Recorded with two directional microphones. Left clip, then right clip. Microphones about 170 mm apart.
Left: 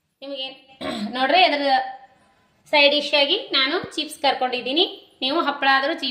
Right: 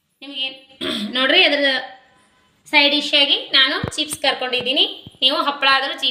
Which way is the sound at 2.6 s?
50° left (ahead or behind).